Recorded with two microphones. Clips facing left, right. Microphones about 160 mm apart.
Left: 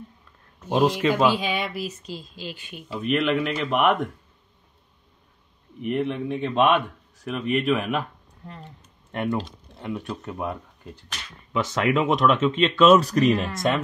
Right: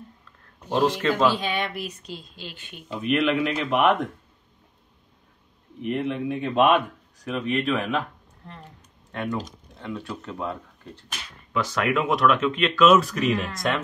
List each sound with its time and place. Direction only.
0.7 s speech: 15° left (ahead or behind)
5.8 s speech: centre (ahead or behind)
7.2 s speech: 5° left (ahead or behind); by 13.4 s 40° left (ahead or behind)